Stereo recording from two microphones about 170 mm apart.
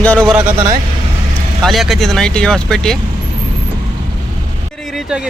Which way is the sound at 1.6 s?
Centre (ahead or behind).